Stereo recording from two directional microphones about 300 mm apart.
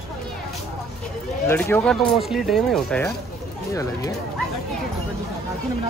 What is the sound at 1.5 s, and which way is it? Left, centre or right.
Speech, centre.